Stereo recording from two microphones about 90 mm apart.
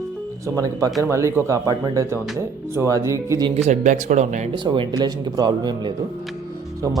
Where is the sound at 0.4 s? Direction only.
40° right (ahead or behind).